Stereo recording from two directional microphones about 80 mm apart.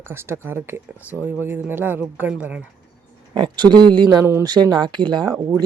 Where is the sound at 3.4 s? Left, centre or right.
Right.